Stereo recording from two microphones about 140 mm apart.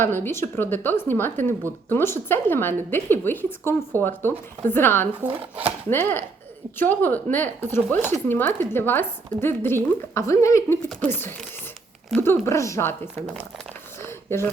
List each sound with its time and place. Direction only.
0.0 s a woman's voice: 15° left (ahead or behind)
5.2 s speech: 10° right (ahead or behind)
5.9 s a woman's voice: 15° left (ahead or behind)
14.0 s a sound: 15° left (ahead or behind)